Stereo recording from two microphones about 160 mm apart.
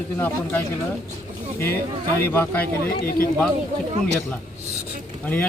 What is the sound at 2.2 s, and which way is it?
Speech, 15° left (ahead or behind).